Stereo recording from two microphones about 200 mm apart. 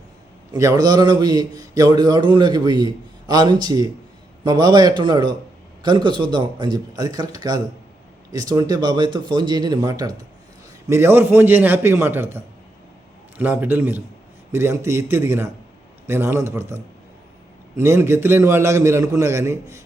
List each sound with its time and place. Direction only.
0.5 s a man's voice: 20° right (ahead or behind)